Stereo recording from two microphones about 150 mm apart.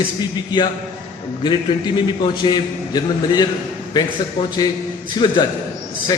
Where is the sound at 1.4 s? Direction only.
30° left (ahead or behind).